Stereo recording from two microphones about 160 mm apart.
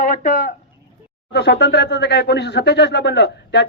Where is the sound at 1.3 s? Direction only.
90° left.